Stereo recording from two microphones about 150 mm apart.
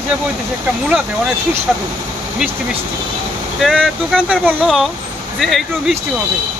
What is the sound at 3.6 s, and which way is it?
Speech, centre (ahead or behind).